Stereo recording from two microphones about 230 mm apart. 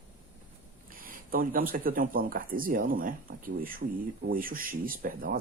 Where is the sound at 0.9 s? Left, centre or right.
Right.